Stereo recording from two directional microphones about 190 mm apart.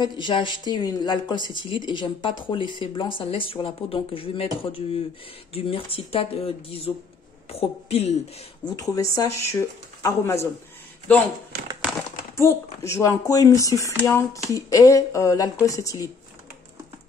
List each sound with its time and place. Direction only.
0.0 s a woman's voice: 25° left (ahead or behind)
8.6 s speech: 20° left (ahead or behind)
12.4 s speech: 15° left (ahead or behind)